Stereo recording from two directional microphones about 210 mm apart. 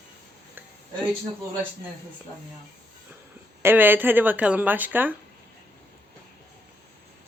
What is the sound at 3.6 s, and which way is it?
Speech, 10° right (ahead or behind).